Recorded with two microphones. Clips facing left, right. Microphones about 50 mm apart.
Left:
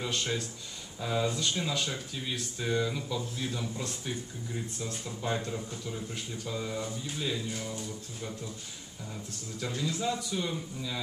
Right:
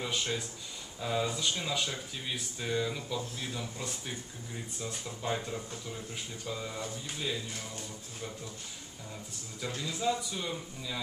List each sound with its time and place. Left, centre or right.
0.0 s speech: centre
9.8 s speech: centre